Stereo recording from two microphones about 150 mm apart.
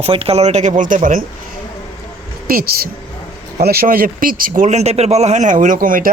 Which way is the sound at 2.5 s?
80° right.